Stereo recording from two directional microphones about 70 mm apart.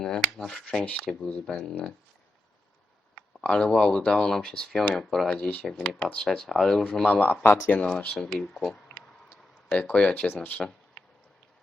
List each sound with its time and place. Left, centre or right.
0.0 s speech: centre
3.2 s speech: centre
6.8 s speech: centre
8.1 s speech: centre
10.6 s a sound: centre